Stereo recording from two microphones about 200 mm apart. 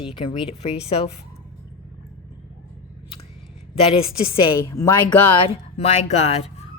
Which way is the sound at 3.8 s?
30° left (ahead or behind).